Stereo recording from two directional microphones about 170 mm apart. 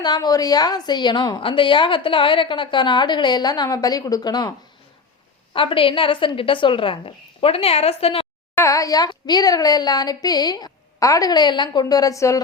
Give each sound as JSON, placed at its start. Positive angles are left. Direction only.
{"t": 0.0, "sound": "a woman's voice", "side_deg": 25}
{"t": 5.5, "sound": "a woman's voice", "side_deg": 30}
{"t": 8.5, "sound": "a woman's voice", "side_deg": 20}